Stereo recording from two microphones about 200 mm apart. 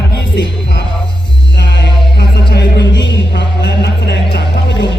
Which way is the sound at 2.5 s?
60° left (ahead or behind).